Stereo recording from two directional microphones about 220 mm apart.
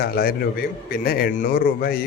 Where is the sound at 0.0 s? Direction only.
40° left (ahead or behind).